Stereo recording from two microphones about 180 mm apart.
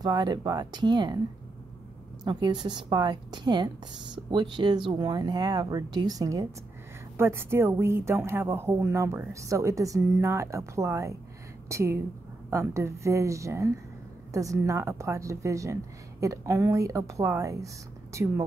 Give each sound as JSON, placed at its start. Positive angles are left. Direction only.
{"t": 0.0, "sound": "a woman's voice", "side_deg": -25}
{"t": 2.2, "sound": "a woman's voice", "side_deg": -25}